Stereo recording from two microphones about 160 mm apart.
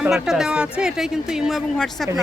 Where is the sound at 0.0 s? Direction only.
5° right (ahead or behind).